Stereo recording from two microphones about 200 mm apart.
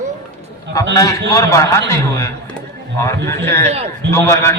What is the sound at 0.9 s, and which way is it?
A man's voice, 15° left (ahead or behind).